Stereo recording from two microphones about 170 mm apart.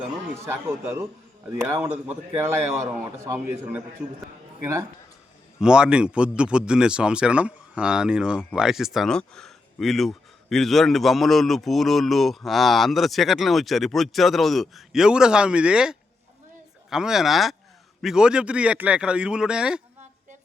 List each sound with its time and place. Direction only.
0.4 s a man's voice: 15° right (ahead or behind)
5.5 s speech: 5° right (ahead or behind)